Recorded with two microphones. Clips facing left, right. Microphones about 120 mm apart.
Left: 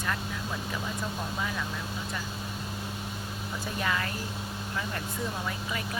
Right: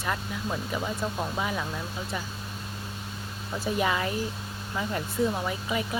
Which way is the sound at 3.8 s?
15° right (ahead or behind).